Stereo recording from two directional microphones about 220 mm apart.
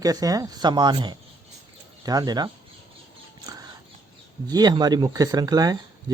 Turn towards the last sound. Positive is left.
turn(degrees=-15)  # may be behind; listen again after turning